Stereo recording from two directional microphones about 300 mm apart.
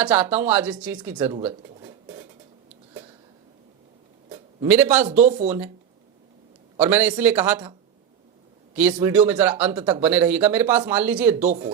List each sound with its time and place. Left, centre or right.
0.0 s speech: centre
4.3 s a sound: centre
5.0 s speech: right
5.5 s speech: centre
6.7 s speech: centre
8.7 s speech: centre
11.4 s speech: right